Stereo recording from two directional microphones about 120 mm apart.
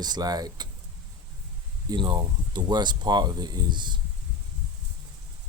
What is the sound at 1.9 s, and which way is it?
Speech, 40° right (ahead or behind).